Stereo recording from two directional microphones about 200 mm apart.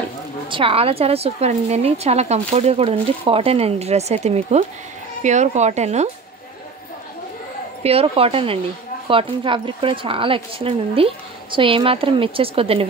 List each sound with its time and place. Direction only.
0.5 s speech: 25° right (ahead or behind)
7.8 s a woman's voice: 30° right (ahead or behind)